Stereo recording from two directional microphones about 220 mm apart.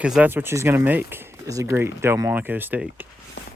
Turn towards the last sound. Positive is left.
turn(degrees=-10)  # may be behind; listen again after turning